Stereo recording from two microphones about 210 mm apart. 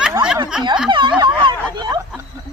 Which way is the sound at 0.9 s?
20° right (ahead or behind).